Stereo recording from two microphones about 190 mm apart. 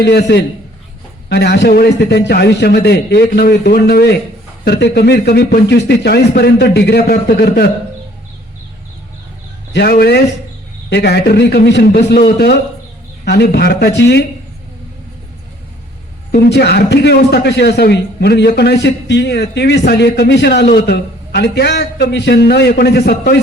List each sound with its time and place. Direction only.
0.0 s a man's voice: 60° left (ahead or behind)
9.7 s a man's voice: 55° left (ahead or behind)
13.2 s a man's voice: 60° left (ahead or behind)
16.3 s a man's voice: 60° left (ahead or behind)